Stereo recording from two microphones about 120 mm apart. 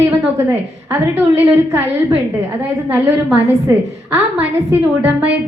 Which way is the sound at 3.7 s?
20° right (ahead or behind).